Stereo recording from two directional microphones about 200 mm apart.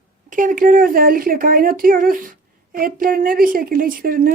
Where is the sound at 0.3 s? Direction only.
40° right (ahead or behind).